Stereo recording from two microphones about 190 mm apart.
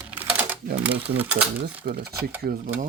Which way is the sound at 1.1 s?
10° right (ahead or behind).